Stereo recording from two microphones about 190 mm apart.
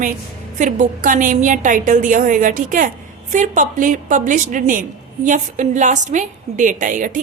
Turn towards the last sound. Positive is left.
turn(degrees=-45)  # may be behind; listen again after turning